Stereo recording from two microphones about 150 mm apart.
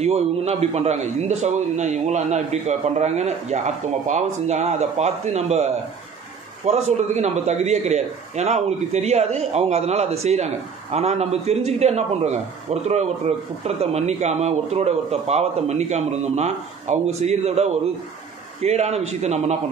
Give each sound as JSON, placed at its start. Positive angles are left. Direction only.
{"t": 0.0, "sound": "a man's voice", "side_deg": -45}